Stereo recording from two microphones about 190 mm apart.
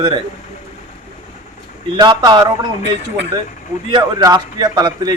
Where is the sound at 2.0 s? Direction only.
25° right (ahead or behind).